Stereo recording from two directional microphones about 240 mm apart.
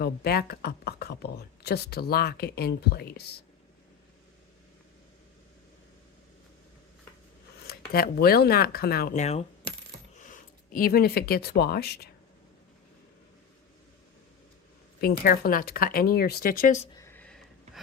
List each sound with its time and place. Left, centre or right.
0.0 s speech: left
7.7 s speech: left
15.0 s speech: left
16.9 s a sound: centre